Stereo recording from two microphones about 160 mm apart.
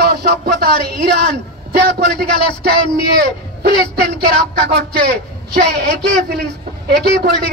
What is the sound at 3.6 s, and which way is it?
A man's voice, 90° right.